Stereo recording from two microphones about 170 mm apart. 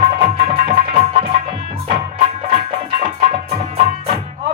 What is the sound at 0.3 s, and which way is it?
Music, 40° right (ahead or behind).